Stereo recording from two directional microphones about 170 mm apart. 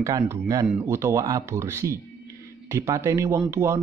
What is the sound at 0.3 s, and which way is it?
Speech, 20° right (ahead or behind).